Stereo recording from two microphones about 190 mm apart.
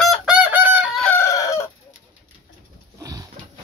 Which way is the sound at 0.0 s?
Centre (ahead or behind).